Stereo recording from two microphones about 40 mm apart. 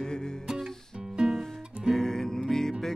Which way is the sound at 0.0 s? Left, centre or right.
Centre.